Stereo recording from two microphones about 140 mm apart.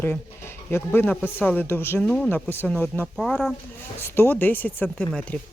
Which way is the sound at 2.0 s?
5° left (ahead or behind).